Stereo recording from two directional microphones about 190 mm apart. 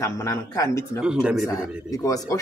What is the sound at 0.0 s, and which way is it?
Speech, 15° left (ahead or behind).